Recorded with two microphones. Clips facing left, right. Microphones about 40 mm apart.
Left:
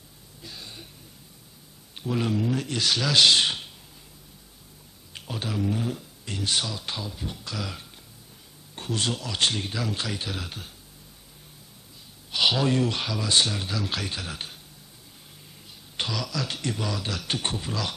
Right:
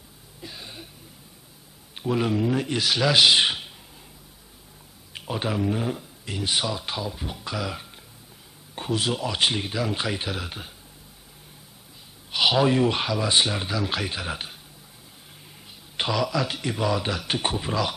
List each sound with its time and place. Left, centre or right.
0.4 s a sound: centre
2.0 s speech: centre
5.1 s speech: centre
12.3 s speech: centre
16.0 s speech: centre